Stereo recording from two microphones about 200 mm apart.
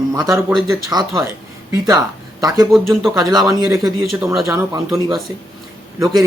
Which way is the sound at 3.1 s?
20° right (ahead or behind).